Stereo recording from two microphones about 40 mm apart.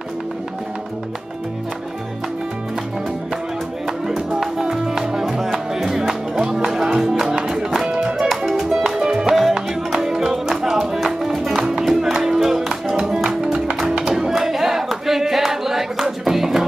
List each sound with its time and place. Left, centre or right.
4.6 s music: centre
13.8 s music: right